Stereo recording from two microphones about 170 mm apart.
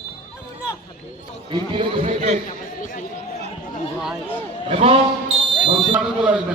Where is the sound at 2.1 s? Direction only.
45° right (ahead or behind).